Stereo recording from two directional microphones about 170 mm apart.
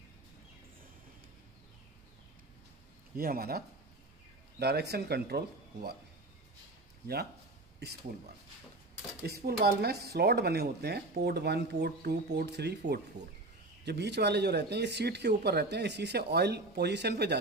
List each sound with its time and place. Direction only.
3.2 s speech: 60° right (ahead or behind)
9.2 s speech: 70° right (ahead or behind)